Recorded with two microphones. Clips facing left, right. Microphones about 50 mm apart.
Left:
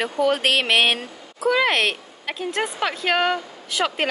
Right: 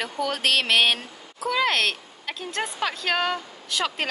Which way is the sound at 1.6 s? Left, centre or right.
Centre.